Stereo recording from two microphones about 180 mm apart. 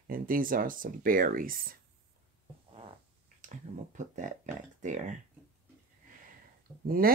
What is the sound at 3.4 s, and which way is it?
Speech, 40° right (ahead or behind).